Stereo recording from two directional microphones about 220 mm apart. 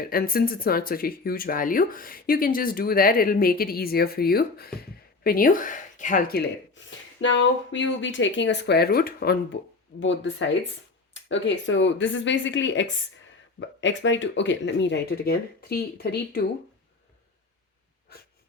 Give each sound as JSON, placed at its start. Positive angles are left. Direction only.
{"t": 0.0, "sound": "speech", "side_deg": 40}
{"t": 10.0, "sound": "speech", "side_deg": 55}